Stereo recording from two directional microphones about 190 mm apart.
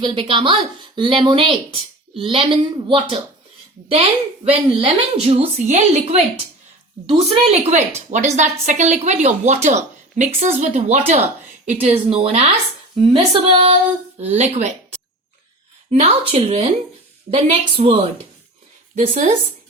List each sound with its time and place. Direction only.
0.0 s speech: 25° right (ahead or behind)
4.4 s a woman's voice: 30° right (ahead or behind)
15.9 s a woman's voice: 30° right (ahead or behind)